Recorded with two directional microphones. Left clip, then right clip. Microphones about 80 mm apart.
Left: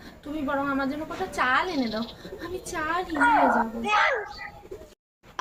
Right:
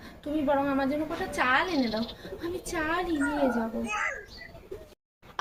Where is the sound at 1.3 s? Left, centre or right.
Left.